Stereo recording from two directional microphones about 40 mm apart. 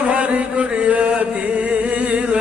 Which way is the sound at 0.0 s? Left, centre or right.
Right.